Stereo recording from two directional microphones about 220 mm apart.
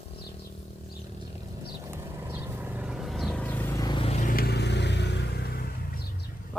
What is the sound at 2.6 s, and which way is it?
Vehicle, 5° right (ahead or behind).